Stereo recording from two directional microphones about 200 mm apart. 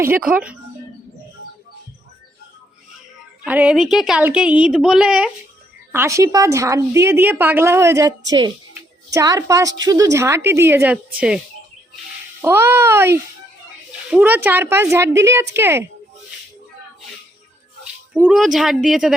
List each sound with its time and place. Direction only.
0.0 s a woman's voice: 10° right (ahead or behind)
3.4 s a woman's voice: 5° right (ahead or behind)
12.4 s a woman's voice: 10° right (ahead or behind)
18.1 s a woman's voice: 5° right (ahead or behind)